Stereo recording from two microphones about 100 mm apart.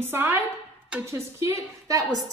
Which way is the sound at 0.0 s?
25° right (ahead or behind).